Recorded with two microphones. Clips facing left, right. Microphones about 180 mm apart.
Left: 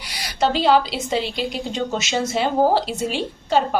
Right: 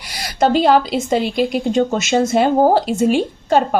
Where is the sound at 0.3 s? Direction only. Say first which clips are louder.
Right 4 dB; 50° right (ahead or behind).